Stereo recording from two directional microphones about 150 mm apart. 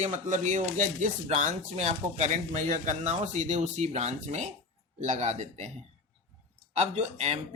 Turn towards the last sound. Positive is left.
turn(degrees=-45)  # may be behind; listen again after turning